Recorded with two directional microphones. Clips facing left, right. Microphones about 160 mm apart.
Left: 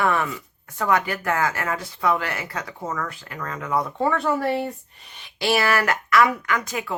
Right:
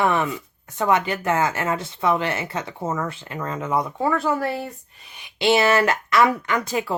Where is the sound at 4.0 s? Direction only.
Centre (ahead or behind).